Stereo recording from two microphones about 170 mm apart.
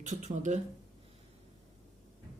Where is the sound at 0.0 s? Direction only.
45° right (ahead or behind).